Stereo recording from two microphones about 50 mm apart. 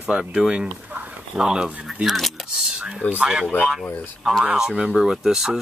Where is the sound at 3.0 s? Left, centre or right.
Left.